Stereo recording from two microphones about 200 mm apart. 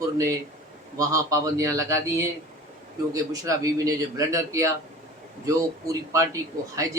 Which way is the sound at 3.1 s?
15° right (ahead or behind).